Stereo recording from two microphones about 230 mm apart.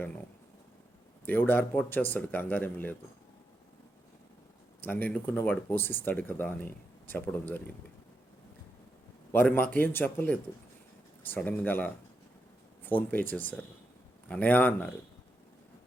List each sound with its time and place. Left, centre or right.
1.2 s speech: centre
4.8 s speech: centre
9.3 s speech: centre